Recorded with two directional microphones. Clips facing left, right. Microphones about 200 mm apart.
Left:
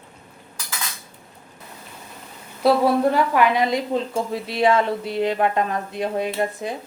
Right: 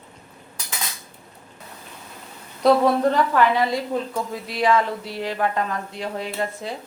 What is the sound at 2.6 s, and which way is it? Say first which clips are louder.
A woman's voice: even; 10° left (ahead or behind).